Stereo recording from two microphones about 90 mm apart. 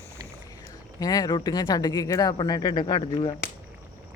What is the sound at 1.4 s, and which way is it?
Speech, 55° left (ahead or behind).